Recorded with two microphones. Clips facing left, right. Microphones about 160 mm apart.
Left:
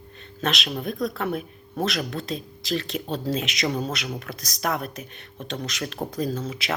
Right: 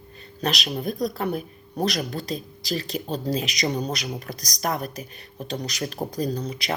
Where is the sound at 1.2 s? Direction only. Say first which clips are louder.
Right 1 dB; centre (ahead or behind).